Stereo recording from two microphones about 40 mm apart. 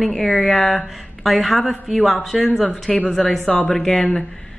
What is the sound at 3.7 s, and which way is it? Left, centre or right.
Speech, centre.